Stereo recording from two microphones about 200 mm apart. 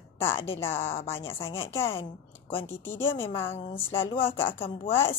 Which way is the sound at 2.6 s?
10° left (ahead or behind).